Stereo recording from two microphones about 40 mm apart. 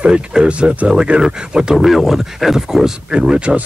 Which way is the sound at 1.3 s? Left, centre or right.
Centre.